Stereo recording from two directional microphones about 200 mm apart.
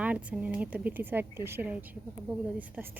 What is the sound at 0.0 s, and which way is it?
A woman's voice, 5° right (ahead or behind).